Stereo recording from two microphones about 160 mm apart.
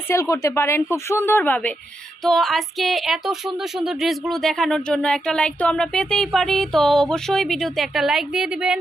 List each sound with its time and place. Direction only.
0.1 s speech: 20° left (ahead or behind); by 8.8 s 5° right (ahead or behind)